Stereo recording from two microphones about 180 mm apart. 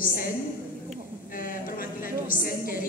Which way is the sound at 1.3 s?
50° left (ahead or behind).